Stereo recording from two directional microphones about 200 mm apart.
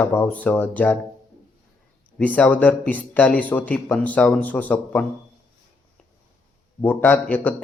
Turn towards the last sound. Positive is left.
turn(degrees=10)  # may be behind; listen again after turning